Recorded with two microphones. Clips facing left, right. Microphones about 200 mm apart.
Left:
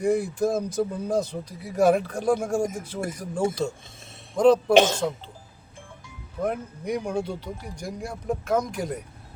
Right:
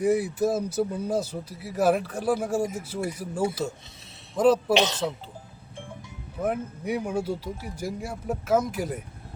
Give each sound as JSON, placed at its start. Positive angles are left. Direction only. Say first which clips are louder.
{"t": 0.0, "sound": "speech", "louder": "even", "side_deg": -5}
{"t": 4.7, "sound": "speech", "louder": "left 5 dB", "side_deg": 50}
{"t": 6.4, "sound": "speech", "louder": "even", "side_deg": -5}